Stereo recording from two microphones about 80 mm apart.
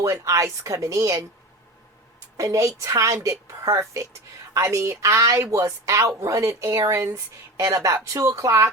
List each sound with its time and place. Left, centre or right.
0.0 s a woman's voice: right
2.4 s a woman's voice: right